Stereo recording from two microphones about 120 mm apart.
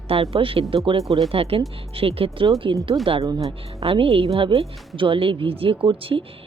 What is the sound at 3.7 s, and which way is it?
Speech, 50° right (ahead or behind).